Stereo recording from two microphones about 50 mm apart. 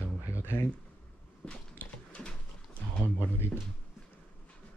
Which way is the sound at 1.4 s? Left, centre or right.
Left.